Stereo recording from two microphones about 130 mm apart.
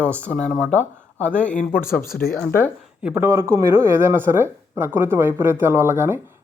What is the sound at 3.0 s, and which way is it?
Speech, 15° right (ahead or behind).